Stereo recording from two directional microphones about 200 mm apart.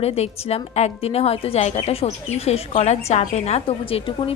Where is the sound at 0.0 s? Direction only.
30° left (ahead or behind).